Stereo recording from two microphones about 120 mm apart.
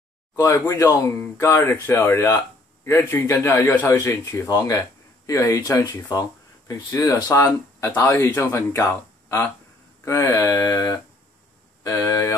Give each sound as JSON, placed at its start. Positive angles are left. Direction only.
{"t": 0.4, "sound": "speech", "side_deg": 25}